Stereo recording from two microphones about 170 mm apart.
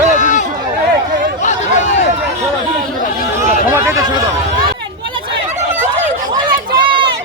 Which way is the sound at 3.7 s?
15° right (ahead or behind).